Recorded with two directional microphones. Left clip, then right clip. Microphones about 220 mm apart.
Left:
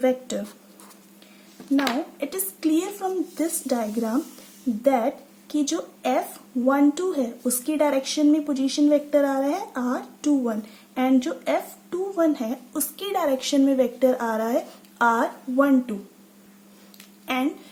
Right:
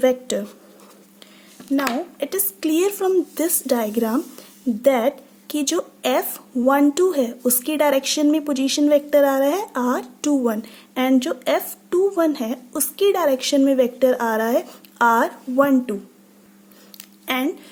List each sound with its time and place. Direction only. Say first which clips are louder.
0.0 s a woman's voice: right 5 dB; 35° right (ahead or behind)
1.8 s a woman's voice: right 2 dB; 35° right (ahead or behind)
17.2 s speech: right 3 dB; 35° right (ahead or behind)